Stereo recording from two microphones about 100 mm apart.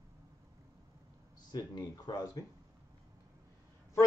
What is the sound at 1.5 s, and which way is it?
Speech, 40° left (ahead or behind).